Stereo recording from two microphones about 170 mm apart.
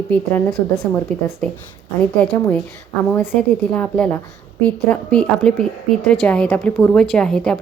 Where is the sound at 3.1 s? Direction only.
5° left (ahead or behind).